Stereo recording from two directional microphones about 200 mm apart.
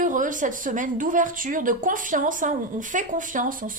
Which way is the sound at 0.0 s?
40° right (ahead or behind).